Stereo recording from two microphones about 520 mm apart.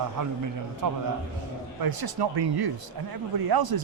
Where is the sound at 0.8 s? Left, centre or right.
Right.